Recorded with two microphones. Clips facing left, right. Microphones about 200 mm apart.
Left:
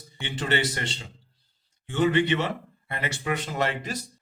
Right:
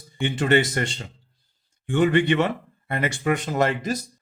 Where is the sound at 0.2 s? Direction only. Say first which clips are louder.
Right 7 dB; 50° right (ahead or behind).